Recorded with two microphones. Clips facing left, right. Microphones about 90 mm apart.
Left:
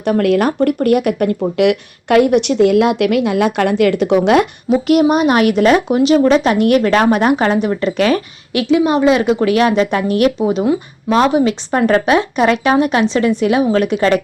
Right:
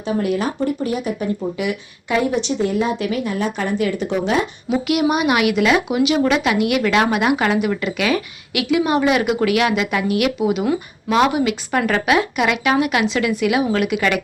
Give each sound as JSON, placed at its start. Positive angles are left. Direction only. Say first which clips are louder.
{"t": 0.0, "sound": "speech", "louder": "left 7 dB", "side_deg": 70}
{"t": 4.9, "sound": "a woman's voice", "louder": "left 6 dB", "side_deg": 40}
{"t": 8.6, "sound": "a woman's voice", "louder": "left 5 dB", "side_deg": 25}